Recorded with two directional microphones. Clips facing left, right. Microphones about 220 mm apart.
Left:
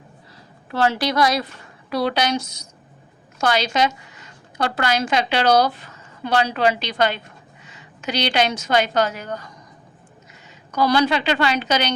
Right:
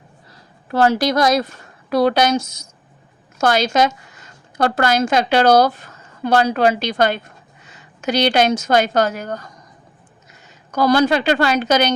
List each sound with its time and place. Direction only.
0.7 s a woman's voice: 45° right (ahead or behind)
10.7 s a woman's voice: 45° right (ahead or behind)